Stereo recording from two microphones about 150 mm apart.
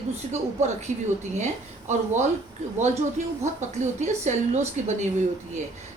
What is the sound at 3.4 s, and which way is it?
Speech, 50° right (ahead or behind).